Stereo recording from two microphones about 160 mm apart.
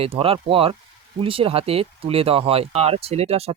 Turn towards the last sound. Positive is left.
turn(degrees=-40)  # may be behind; listen again after turning